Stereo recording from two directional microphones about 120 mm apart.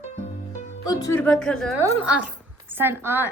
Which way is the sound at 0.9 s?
30° left (ahead or behind).